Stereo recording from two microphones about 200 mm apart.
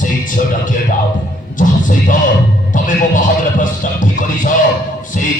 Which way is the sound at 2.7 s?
40° left (ahead or behind).